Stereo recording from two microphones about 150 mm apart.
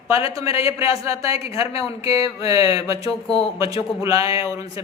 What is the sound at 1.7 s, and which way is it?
Speech, 40° left (ahead or behind).